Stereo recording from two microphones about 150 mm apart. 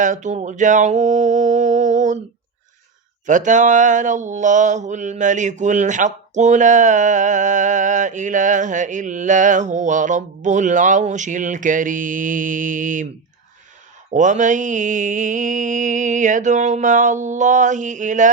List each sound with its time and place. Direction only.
0.0 s a sound: 55° right (ahead or behind)
3.2 s mantra: 55° right (ahead or behind)
14.1 s mantra: 55° right (ahead or behind)